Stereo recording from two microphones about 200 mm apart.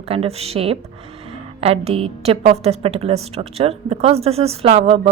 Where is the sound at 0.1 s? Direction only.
30° right (ahead or behind).